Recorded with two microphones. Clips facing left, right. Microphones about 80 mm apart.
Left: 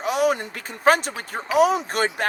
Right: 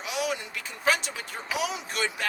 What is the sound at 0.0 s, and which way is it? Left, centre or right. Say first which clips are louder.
Speech: left 9 dB; left.